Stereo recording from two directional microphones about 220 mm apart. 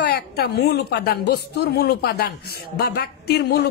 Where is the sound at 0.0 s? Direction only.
45° left (ahead or behind).